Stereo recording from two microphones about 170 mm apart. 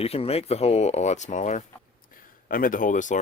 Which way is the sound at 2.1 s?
55° left (ahead or behind).